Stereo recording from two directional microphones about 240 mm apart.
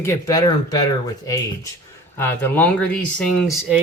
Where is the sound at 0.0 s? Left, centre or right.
Centre.